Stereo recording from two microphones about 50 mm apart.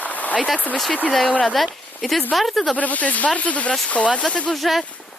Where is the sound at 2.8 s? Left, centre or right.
Left.